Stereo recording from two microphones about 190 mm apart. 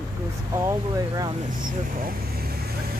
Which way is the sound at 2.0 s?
55° right (ahead or behind).